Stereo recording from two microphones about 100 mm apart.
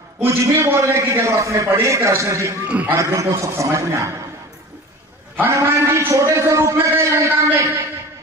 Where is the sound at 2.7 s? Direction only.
15° right (ahead or behind).